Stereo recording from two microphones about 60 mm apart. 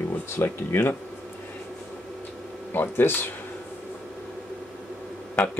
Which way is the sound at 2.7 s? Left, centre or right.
Left.